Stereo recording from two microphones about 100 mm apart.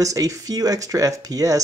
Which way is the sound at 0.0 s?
35° right (ahead or behind).